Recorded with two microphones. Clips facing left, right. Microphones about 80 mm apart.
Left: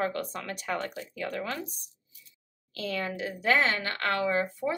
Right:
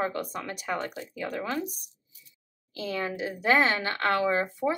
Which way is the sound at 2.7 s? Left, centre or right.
Centre.